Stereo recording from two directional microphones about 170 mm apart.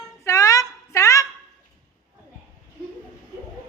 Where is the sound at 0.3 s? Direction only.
20° left (ahead or behind).